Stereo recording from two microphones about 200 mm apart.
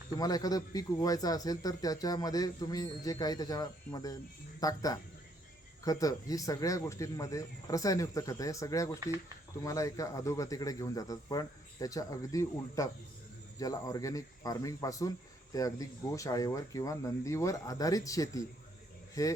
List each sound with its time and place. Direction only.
0.2 s a man's voice: 20° left (ahead or behind)